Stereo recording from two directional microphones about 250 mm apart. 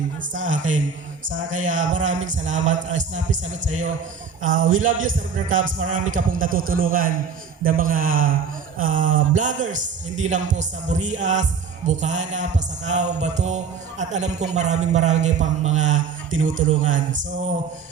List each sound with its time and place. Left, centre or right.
0.3 s a man's voice: right